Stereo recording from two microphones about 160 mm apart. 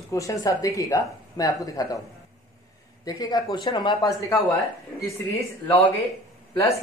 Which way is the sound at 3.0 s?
25° left (ahead or behind).